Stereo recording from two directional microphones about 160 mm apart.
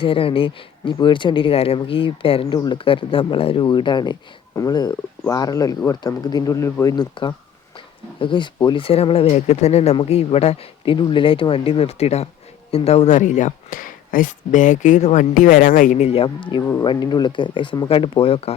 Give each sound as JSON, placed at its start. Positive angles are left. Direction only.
{"t": 0.0, "sound": "speech", "side_deg": 35}